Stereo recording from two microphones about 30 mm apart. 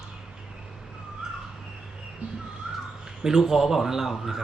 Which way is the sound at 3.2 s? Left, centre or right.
Centre.